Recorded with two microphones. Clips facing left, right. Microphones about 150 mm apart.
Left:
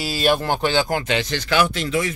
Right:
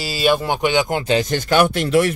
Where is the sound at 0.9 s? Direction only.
35° right (ahead or behind); by 2.1 s 65° right (ahead or behind).